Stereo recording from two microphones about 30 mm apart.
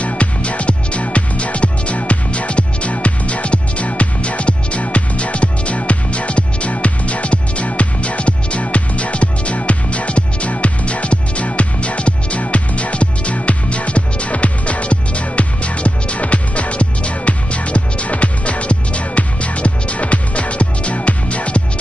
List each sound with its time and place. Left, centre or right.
0.0 s music: left